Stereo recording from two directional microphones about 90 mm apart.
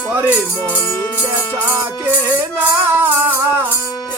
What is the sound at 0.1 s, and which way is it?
Music, 15° right (ahead or behind).